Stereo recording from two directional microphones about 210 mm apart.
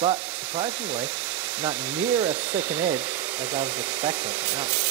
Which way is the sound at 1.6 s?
15° right (ahead or behind).